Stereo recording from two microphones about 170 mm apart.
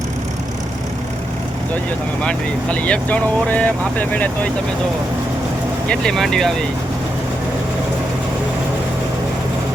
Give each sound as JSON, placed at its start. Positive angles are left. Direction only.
{"t": 2.2, "sound": "speech", "side_deg": 5}
{"t": 5.9, "sound": "speech", "side_deg": 5}